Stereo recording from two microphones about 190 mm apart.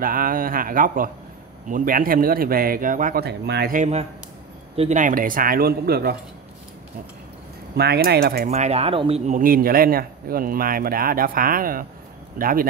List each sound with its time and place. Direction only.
0.0 s speech: 45° right (ahead or behind)
3.7 s speech: 35° right (ahead or behind); by 6.1 s 55° right (ahead or behind)
7.7 s speech: 60° right (ahead or behind)
8.5 s speech: 35° right (ahead or behind)